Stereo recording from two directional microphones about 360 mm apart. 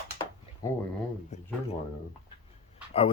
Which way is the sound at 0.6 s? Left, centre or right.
Centre.